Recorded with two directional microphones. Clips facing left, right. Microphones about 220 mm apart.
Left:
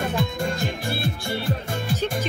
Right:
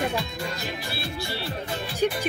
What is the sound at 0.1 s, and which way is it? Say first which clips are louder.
Music: left 5 dB; 50° left (ahead or behind).